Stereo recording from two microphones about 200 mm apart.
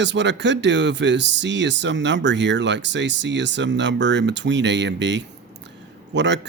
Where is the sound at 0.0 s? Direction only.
60° right (ahead or behind).